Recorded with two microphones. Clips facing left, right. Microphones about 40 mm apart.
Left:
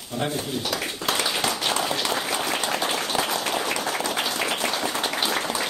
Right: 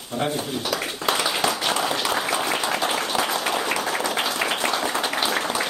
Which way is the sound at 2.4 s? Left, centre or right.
Centre.